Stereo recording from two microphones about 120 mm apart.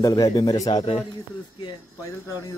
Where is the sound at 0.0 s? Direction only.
30° left (ahead or behind).